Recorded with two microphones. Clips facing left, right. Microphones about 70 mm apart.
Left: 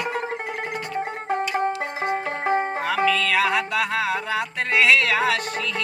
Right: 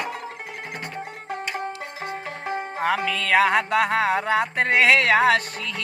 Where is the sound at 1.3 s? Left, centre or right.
Left.